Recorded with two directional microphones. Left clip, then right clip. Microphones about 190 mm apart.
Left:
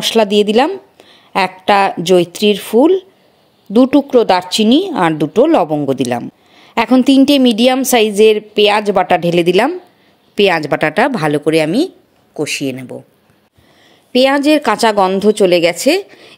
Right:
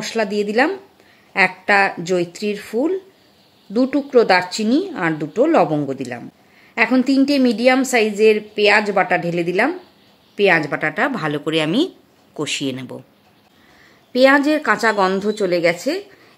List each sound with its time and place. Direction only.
0.0 s a woman's voice: 35° left (ahead or behind)
11.5 s speech: 20° left (ahead or behind)
14.1 s a woman's voice: 35° left (ahead or behind)